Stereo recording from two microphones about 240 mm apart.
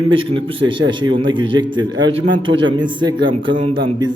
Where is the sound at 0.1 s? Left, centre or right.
Right.